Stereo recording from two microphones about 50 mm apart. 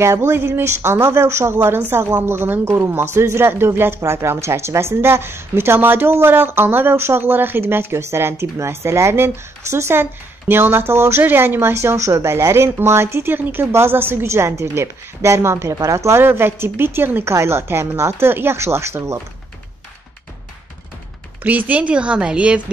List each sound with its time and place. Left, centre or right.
0.0 s speech: right
10.5 s a woman's voice: right
11.2 s a woman's voice: right
11.7 s a woman's voice: right
14.2 s a woman's voice: right
16.2 s a woman's voice: right
17.3 s speech: right
18.3 s speech: right
21.4 s a woman's voice: right